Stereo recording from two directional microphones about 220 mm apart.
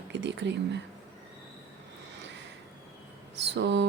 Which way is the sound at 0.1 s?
55° right (ahead or behind).